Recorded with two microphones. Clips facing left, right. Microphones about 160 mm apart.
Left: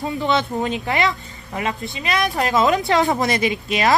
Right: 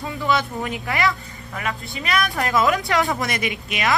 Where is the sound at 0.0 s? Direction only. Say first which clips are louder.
Left 2 dB; 25° left (ahead or behind).